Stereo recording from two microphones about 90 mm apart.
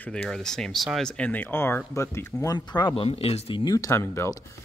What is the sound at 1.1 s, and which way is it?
Speech, 15° left (ahead or behind).